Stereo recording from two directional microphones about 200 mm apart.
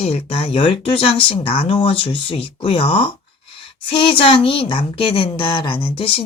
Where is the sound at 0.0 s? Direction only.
30° left (ahead or behind).